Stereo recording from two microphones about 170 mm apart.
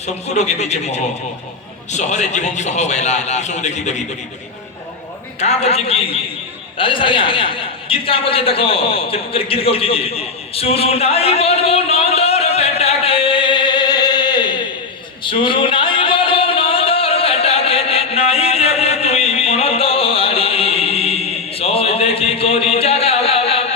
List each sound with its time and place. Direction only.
0.0 s a man's voice: 40° left (ahead or behind)
5.4 s a man's voice: 40° left (ahead or behind)
15.2 s a sound: 30° left (ahead or behind)